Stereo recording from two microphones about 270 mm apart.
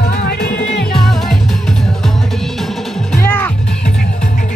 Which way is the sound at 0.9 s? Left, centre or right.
Centre.